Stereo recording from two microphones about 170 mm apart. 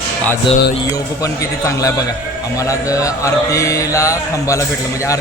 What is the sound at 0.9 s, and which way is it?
Music, 20° left (ahead or behind).